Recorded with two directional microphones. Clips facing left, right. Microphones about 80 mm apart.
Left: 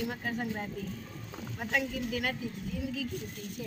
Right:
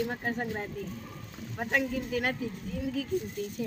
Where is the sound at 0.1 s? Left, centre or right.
Right.